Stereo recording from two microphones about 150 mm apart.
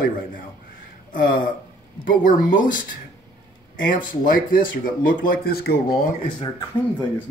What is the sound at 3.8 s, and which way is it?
Speech, 65° left (ahead or behind).